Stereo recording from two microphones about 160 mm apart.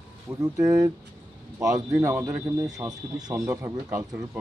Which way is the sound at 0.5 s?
20° right (ahead or behind).